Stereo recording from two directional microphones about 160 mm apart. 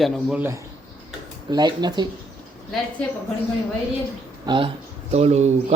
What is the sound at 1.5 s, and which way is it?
Speech, 25° right (ahead or behind).